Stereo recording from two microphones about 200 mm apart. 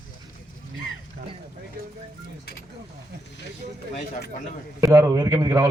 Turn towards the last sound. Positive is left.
turn(degrees=-20)  # may be behind; listen again after turning